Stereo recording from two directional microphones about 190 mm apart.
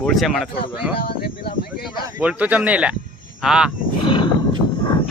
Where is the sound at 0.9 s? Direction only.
50° left (ahead or behind).